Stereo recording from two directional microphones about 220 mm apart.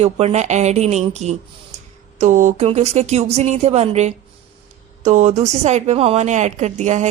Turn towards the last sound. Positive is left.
turn(degrees=-30)  # may be behind; listen again after turning